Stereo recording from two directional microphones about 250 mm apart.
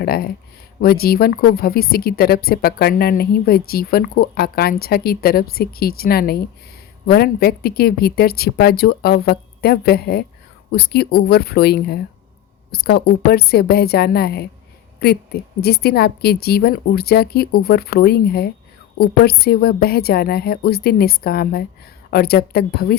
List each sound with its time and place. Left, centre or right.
0.0 s speech: left